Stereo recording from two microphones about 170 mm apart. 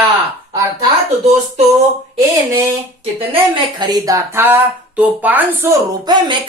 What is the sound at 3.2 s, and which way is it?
Speech, 25° right (ahead or behind).